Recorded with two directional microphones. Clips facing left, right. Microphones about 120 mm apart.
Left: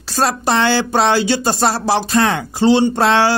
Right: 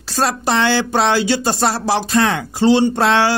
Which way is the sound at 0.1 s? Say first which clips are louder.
Left 1 dB; 35° left (ahead or behind).